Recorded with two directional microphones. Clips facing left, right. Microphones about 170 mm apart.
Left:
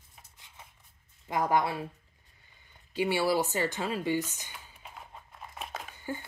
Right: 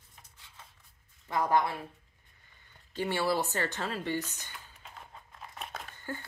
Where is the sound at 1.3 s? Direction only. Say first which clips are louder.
Left 1 dB; 15° left (ahead or behind).